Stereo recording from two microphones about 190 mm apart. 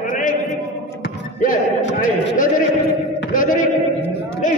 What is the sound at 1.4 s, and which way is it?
Basketball bounce, 45° left (ahead or behind).